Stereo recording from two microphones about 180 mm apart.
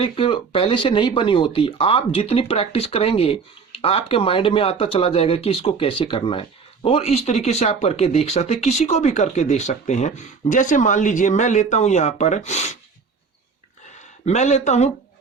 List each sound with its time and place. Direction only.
0.0 s speech: 30° left (ahead or behind)
14.0 s speech: 40° left (ahead or behind)